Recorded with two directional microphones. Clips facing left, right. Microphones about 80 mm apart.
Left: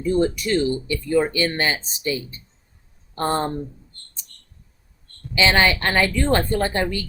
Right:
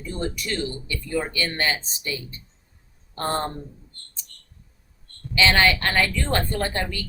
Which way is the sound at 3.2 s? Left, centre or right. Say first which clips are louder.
Left 4 dB; centre.